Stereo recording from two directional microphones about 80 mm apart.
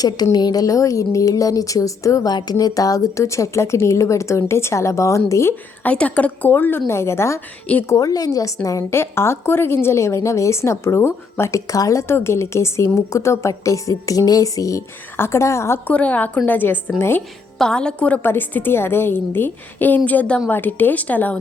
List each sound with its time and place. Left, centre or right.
0.0 s a woman's voice: left
2.3 s a woman's voice: left
5.8 s a woman's voice: centre; by 7.4 s left
7.9 s a woman's voice: left
15.1 s a woman's voice: left
15.9 s a woman's voice: centre
17.6 s a woman's voice: centre